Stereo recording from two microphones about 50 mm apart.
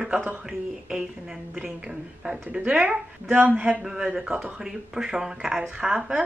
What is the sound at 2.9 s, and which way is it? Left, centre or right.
Speech, right.